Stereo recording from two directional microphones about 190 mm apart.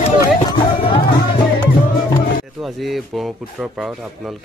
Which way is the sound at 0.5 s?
25° left (ahead or behind).